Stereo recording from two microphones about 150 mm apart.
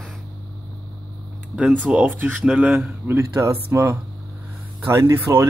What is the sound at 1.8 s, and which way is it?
Speech, 10° right (ahead or behind).